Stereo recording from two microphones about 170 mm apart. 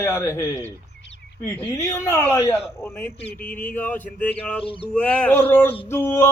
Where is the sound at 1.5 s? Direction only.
15° left (ahead or behind).